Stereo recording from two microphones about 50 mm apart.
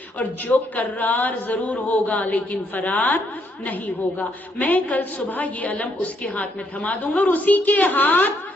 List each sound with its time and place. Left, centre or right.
0.2 s a woman's voice: left